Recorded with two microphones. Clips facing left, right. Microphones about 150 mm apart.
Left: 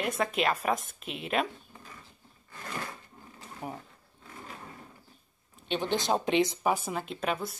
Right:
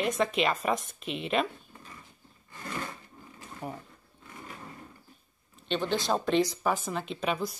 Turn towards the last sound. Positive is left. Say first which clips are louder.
# right 1 dB
turn(degrees=0)  # may be behind; listen again after turning